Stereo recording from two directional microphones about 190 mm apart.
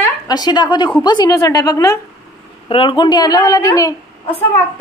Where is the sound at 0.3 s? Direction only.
20° left (ahead or behind).